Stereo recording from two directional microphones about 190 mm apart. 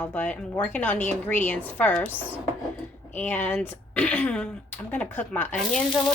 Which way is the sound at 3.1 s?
10° left (ahead or behind).